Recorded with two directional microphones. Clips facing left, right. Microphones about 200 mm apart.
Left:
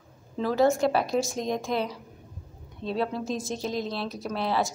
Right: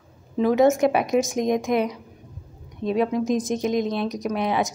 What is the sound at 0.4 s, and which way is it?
Speech, 20° right (ahead or behind).